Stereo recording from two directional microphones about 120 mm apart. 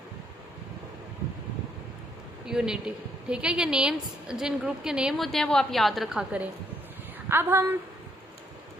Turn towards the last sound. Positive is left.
turn(degrees=-20)  # may be behind; listen again after turning